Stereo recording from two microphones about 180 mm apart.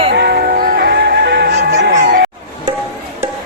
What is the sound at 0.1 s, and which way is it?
Music, 65° right (ahead or behind).